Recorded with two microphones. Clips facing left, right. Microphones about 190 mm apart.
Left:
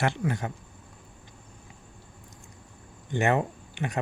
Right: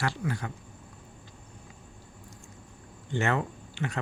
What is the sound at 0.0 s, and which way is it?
Speech, 20° left (ahead or behind).